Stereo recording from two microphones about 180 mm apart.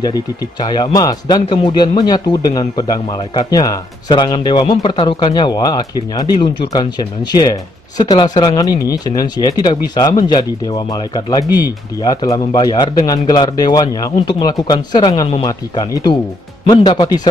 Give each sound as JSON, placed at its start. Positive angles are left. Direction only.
{"t": 0.0, "sound": "speech", "side_deg": 25}